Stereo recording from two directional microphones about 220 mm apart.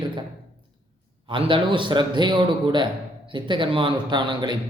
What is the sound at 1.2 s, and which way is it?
A man's voice, 25° right (ahead or behind).